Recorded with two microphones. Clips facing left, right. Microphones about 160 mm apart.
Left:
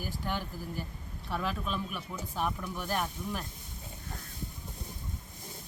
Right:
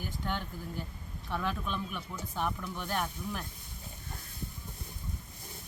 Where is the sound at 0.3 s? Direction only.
5° left (ahead or behind).